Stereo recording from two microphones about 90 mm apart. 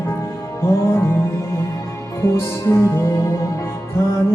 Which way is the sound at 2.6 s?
30° left (ahead or behind).